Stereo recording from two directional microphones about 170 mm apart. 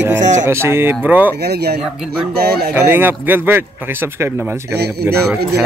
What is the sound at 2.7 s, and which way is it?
Speech, 10° right (ahead or behind).